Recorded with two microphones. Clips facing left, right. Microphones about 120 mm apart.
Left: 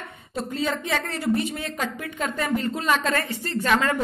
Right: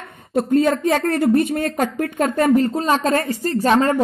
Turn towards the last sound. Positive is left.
turn(degrees=-35)  # may be behind; listen again after turning